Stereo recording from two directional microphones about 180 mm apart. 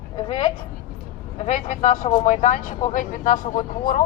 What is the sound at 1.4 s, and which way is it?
Speech, 40° left (ahead or behind).